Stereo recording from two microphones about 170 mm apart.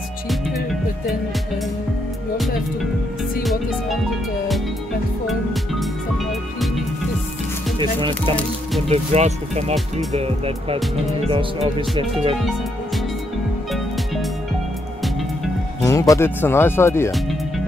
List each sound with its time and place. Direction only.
5.2 s speech: centre (ahead or behind)
8.1 s speech: 10° left (ahead or behind)
8.8 s speech: 40° right (ahead or behind)
13.7 s music: centre (ahead or behind)
15.8 s speech: 20° left (ahead or behind)